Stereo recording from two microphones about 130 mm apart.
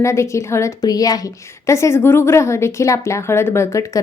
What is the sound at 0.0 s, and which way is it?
A woman's voice, 20° left (ahead or behind).